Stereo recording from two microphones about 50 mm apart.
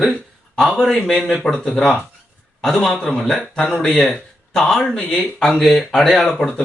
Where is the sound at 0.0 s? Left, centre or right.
Centre.